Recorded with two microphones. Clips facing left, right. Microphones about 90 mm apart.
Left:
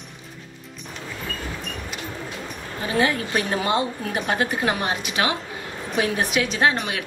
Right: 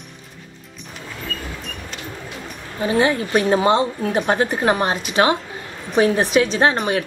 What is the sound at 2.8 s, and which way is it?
Speech, 30° right (ahead or behind).